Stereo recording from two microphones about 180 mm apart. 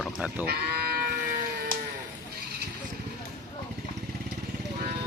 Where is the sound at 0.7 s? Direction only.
60° right (ahead or behind).